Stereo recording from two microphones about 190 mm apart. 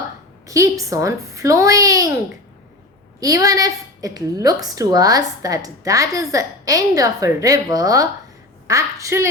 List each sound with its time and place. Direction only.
0.4 s a woman's voice: 15° right (ahead or behind)
3.2 s a woman's voice: 20° right (ahead or behind)